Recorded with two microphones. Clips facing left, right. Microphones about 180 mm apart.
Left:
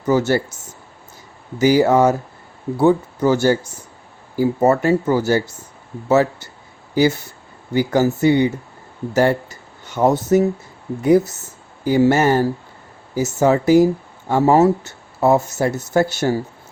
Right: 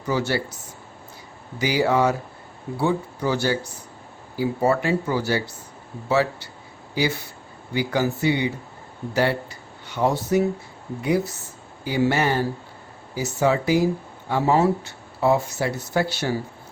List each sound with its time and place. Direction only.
0.0 s speech: 45° left (ahead or behind)